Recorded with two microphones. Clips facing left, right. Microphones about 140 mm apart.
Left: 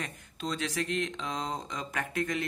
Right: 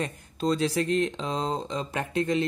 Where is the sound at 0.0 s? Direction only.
35° right (ahead or behind).